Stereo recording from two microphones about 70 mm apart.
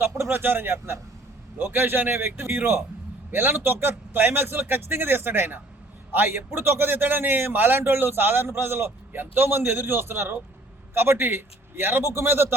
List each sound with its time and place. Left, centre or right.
0.0 s a man's voice: right